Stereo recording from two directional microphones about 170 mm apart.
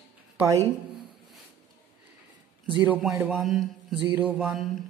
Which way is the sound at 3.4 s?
Centre (ahead or behind).